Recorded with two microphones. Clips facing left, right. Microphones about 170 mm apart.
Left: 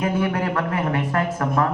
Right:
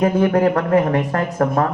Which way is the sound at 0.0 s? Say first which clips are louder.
Right 7 dB; 40° right (ahead or behind).